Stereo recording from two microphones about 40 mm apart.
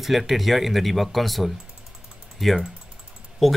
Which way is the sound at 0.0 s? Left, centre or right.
Centre.